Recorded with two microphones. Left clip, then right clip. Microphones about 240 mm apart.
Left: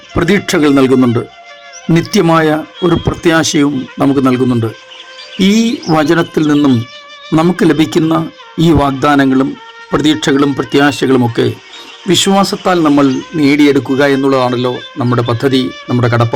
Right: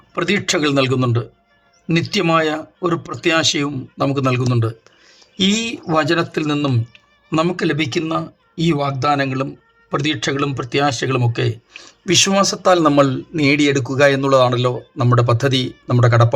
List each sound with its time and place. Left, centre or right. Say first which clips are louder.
0.2 s speech: left 7 dB; left